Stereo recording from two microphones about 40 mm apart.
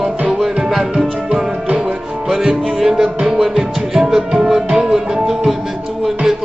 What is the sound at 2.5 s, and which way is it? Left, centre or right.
Music, centre.